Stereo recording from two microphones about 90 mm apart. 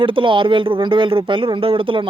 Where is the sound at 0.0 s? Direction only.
70° right (ahead or behind).